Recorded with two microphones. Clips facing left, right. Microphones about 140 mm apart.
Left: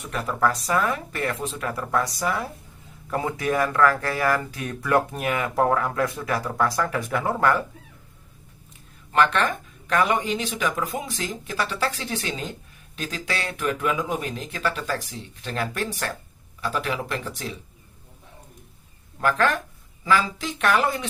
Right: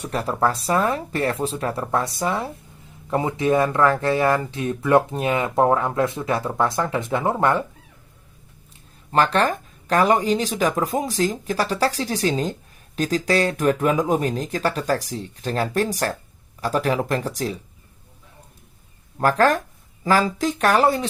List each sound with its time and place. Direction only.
0.0 s speech: 30° right (ahead or behind)
9.1 s speech: 35° right (ahead or behind)
19.2 s speech: 40° right (ahead or behind)